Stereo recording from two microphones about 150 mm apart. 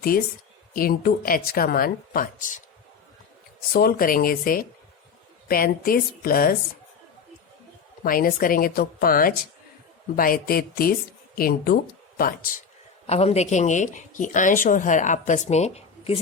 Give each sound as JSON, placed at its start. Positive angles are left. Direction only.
{"t": 0.8, "sound": "speech", "side_deg": 80}
{"t": 3.7, "sound": "speech", "side_deg": 80}
{"t": 8.0, "sound": "speech", "side_deg": 70}
{"t": 13.1, "sound": "speech", "side_deg": 45}